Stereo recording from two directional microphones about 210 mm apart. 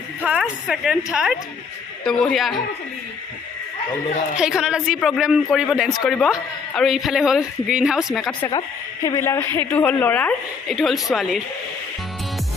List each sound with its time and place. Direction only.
0.2 s speech: 5° right (ahead or behind)
4.4 s speech: 5° right (ahead or behind)
8.4 s a woman's voice: 20° left (ahead or behind); by 11.4 s centre (ahead or behind)